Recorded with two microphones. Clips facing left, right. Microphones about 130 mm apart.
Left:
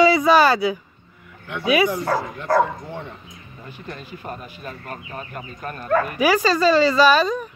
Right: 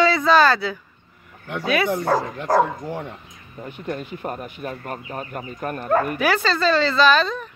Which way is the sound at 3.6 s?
60° right (ahead or behind).